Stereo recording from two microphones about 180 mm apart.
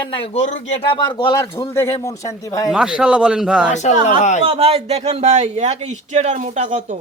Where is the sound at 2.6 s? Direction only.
5° right (ahead or behind).